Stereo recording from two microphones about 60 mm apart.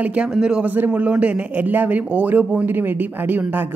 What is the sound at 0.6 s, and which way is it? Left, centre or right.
Speech, right.